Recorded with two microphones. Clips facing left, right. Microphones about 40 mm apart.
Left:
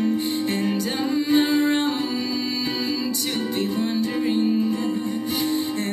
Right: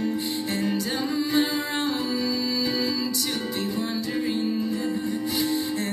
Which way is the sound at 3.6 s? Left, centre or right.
Left.